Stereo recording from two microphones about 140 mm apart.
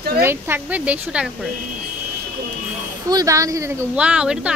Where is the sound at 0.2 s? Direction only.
15° right (ahead or behind).